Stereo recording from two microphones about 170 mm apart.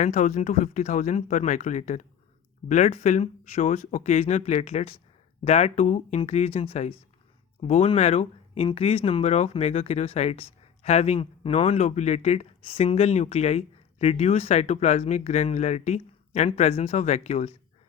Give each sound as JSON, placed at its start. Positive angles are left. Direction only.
{"t": 0.0, "sound": "speech", "side_deg": 45}